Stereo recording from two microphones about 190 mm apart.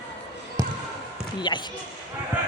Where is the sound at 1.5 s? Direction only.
25° left (ahead or behind).